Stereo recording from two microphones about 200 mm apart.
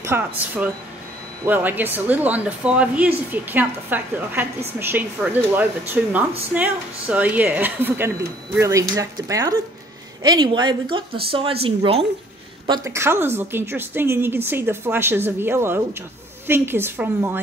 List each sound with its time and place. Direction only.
0.0 s speech: 10° right (ahead or behind); by 12.1 s 30° right (ahead or behind)
12.6 s speech: 20° right (ahead or behind)